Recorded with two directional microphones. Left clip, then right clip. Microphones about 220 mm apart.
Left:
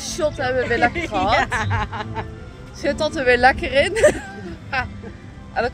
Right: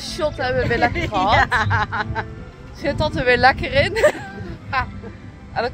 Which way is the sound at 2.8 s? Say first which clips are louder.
Even; 20° left (ahead or behind).